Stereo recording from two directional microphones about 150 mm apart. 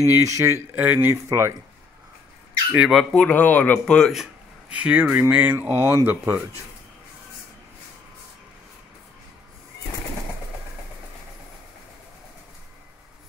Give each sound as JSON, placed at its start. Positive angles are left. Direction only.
{"t": 0.0, "sound": "speech", "side_deg": -20}
{"t": 2.7, "sound": "speech", "side_deg": -5}